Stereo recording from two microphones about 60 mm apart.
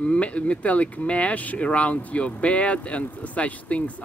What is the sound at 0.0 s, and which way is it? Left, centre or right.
Speech, centre.